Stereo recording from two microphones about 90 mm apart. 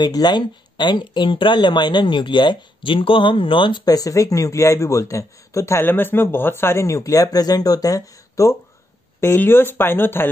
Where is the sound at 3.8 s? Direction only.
45° left (ahead or behind).